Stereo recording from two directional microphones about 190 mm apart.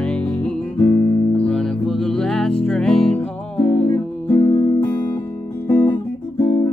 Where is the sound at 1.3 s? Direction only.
5° left (ahead or behind); by 4.8 s 20° left (ahead or behind).